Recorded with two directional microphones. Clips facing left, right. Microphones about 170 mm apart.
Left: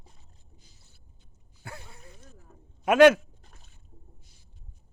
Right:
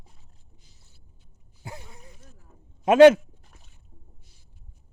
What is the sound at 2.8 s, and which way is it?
Speech, 25° right (ahead or behind).